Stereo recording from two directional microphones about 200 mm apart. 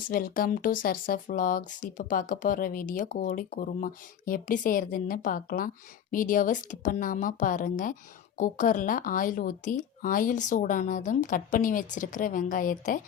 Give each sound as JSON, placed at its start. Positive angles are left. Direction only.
{"t": 0.1, "sound": "speech", "side_deg": 45}